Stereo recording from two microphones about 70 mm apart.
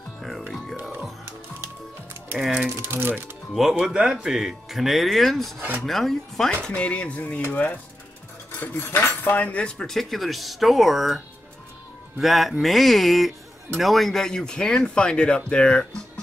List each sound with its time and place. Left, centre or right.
2.3 s speech: centre
2.7 s speech: right
3.8 s speech: centre
6.7 s speech: centre
8.7 s speech: left; by 11.1 s centre
12.2 s speech: centre